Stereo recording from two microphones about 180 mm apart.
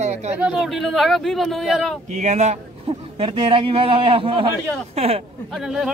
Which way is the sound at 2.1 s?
40° right (ahead or behind).